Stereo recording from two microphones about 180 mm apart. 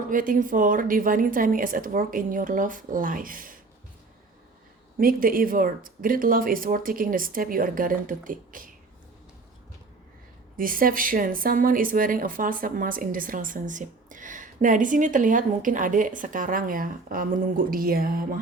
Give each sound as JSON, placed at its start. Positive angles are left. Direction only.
{"t": 0.1, "sound": "speech", "side_deg": -50}
{"t": 4.9, "sound": "speech", "side_deg": -50}
{"t": 10.6, "sound": "speech", "side_deg": -50}